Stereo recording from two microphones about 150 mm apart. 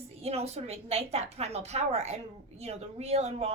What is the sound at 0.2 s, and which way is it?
A woman's voice, 45° right (ahead or behind).